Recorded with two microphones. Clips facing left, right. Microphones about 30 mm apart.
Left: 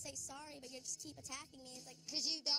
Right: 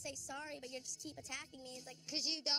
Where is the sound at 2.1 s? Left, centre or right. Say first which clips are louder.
Right 2 dB; right.